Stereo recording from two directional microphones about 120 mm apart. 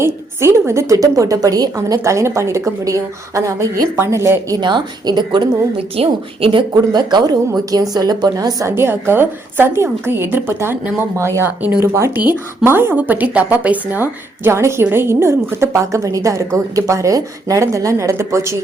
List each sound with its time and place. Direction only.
0.0 s a woman's voice: 20° right (ahead or behind); by 5.5 s 35° right (ahead or behind)
5.7 s a woman's voice: 50° right (ahead or behind); by 18.5 s 25° right (ahead or behind)